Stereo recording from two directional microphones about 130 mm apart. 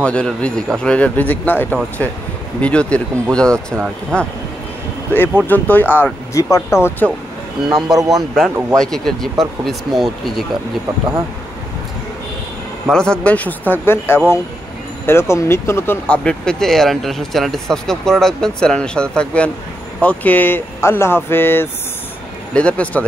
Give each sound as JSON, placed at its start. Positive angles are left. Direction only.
{"t": 0.0, "sound": "a man's voice", "side_deg": 10}
{"t": 7.6, "sound": "speech", "side_deg": -5}
{"t": 12.9, "sound": "a man's voice", "side_deg": 5}